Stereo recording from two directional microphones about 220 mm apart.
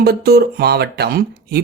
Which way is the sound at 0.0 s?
45° right (ahead or behind).